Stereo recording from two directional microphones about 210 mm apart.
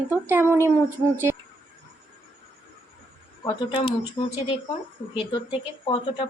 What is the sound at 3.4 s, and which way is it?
Speech, 25° left (ahead or behind).